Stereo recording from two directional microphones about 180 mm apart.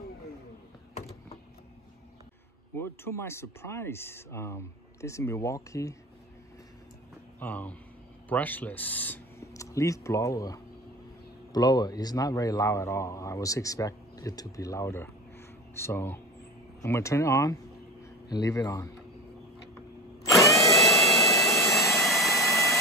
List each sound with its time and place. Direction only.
2.7 s speech: 15° left (ahead or behind)
7.3 s a man's voice: 10° left (ahead or behind)
20.2 s drill: centre (ahead or behind)
22.0 s vacuum cleaner: centre (ahead or behind)